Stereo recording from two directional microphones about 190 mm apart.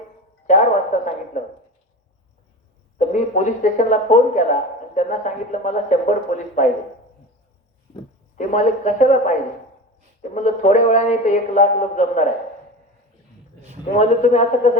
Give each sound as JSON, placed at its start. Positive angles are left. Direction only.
{"t": 0.4, "sound": "a sound", "side_deg": 40}
{"t": 3.1, "sound": "speech", "side_deg": 40}
{"t": 8.4, "sound": "speech", "side_deg": 40}
{"t": 13.9, "sound": "speech", "side_deg": 40}